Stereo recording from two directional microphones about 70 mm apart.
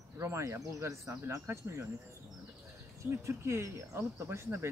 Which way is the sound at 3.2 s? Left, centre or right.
Right.